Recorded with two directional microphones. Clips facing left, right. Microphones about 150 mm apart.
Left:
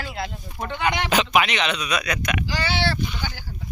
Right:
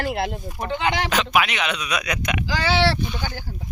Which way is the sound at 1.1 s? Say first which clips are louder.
Left 1 dB; centre (ahead or behind).